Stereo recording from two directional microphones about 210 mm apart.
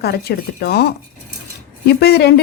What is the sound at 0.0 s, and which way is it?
A woman's voice, 50° left (ahead or behind).